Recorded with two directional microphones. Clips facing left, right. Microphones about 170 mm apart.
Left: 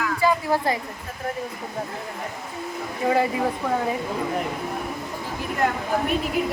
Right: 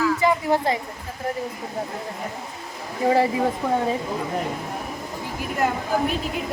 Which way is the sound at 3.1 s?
30° right (ahead or behind).